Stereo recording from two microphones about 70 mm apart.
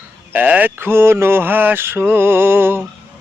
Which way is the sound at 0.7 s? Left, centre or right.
Right.